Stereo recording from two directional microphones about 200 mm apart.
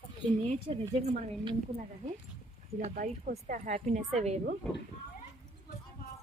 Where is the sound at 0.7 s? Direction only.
35° right (ahead or behind).